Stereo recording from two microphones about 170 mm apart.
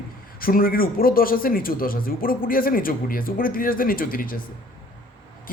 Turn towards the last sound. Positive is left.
turn(degrees=55)  # may be behind; listen again after turning